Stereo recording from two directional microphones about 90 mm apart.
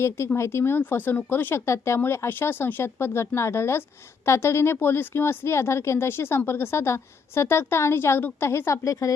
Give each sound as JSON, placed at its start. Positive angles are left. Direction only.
{"t": 0.3, "sound": "speech", "side_deg": 30}